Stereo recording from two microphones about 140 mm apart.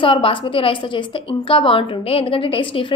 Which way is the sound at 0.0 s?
40° left (ahead or behind).